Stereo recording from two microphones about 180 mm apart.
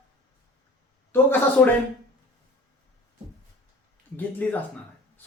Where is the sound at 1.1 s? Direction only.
10° left (ahead or behind).